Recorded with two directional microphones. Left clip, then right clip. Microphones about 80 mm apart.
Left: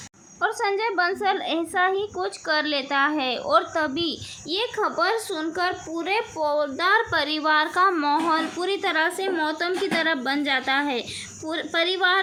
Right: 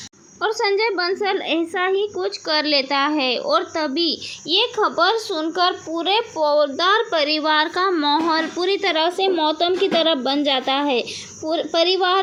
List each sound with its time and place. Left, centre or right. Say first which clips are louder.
0.4 s a woman's voice: right 4 dB; right; by 2.3 s centre
2.5 s speech: right 5 dB; right
6.4 s a woman's voice: right 6 dB; right
8.4 s a woman's voice: right 5 dB; right
9.2 s a woman's voice: right 6 dB; right
9.5 s speech: right 6 dB; left
10.2 s a woman's voice: right 4 dB; right
11.4 s a woman's voice: right 6 dB; right